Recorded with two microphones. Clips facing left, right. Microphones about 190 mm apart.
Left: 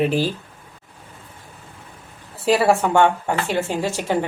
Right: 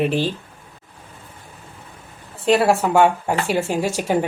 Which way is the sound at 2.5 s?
Centre (ahead or behind).